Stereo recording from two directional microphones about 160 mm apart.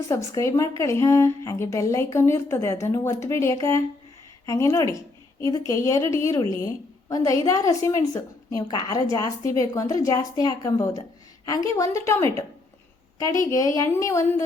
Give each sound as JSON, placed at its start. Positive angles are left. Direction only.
{"t": 0.1, "sound": "a woman's voice", "side_deg": 20}